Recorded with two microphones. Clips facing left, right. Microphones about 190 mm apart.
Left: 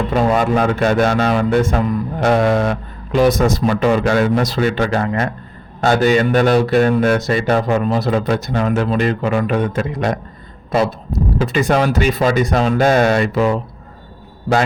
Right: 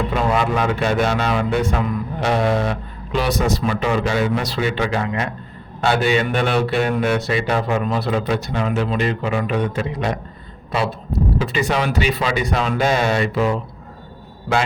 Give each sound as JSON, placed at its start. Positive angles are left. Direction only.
{"t": 0.1, "sound": "speech", "side_deg": 40}
{"t": 11.3, "sound": "speech", "side_deg": 45}